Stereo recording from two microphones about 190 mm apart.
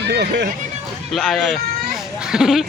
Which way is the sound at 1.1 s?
Centre (ahead or behind).